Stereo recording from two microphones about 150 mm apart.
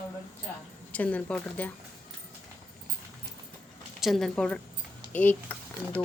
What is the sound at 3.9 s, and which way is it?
Speech, centre (ahead or behind).